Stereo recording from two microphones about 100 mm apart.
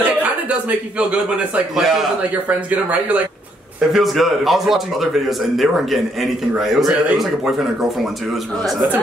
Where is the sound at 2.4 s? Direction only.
15° right (ahead or behind).